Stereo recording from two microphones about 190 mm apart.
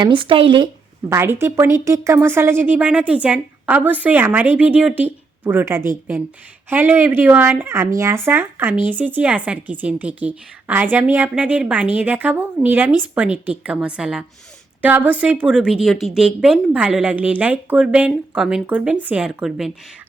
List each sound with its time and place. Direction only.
0.0 s speech: 25° right (ahead or behind)
1.1 s a woman's voice: 15° right (ahead or behind)